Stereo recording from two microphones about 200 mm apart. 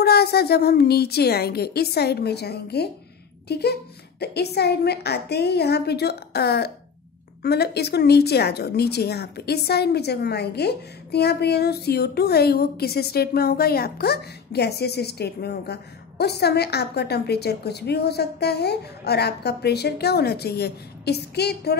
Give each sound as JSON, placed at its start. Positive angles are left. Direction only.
{"t": 0.0, "sound": "a woman's voice", "side_deg": 55}